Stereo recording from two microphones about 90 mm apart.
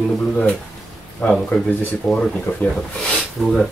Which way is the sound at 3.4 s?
Centre (ahead or behind).